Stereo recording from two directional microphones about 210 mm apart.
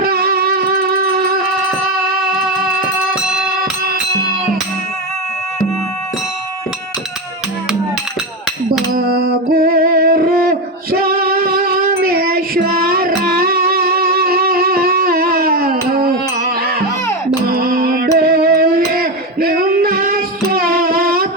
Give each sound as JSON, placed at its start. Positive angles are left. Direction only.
{"t": 0.0, "sound": "music", "side_deg": -45}
{"t": 9.0, "sound": "music", "side_deg": -45}
{"t": 10.9, "sound": "female singing", "side_deg": -45}
{"t": 12.8, "sound": "music", "side_deg": -45}